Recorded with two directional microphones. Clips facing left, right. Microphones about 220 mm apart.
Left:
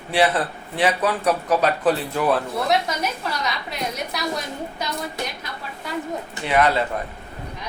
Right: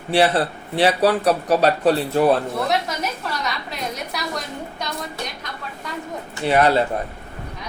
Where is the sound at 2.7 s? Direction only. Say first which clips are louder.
Left 1 dB; centre (ahead or behind).